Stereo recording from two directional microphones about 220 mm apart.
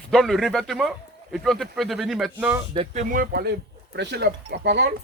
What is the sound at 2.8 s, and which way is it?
Speech, 35° right (ahead or behind).